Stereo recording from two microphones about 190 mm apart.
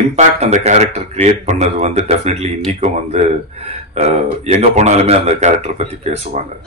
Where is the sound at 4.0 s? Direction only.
35° right (ahead or behind).